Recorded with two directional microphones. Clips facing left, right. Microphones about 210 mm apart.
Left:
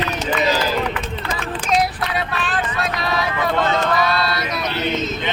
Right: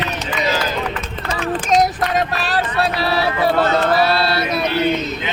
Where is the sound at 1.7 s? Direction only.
40° right (ahead or behind).